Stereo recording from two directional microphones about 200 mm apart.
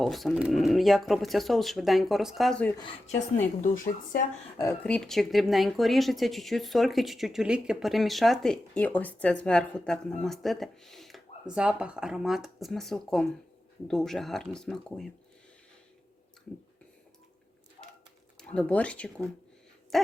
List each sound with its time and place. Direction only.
0.0 s speech: centre (ahead or behind)
3.1 s a woman's voice: 35° left (ahead or behind)
4.5 s a woman's voice: 15° left (ahead or behind)
4.9 s speech: 5° left (ahead or behind)
18.3 s speech: 5° left (ahead or behind)
19.9 s hoot: centre (ahead or behind)